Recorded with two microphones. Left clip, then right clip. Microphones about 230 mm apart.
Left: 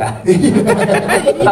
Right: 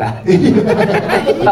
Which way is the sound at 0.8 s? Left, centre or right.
Left.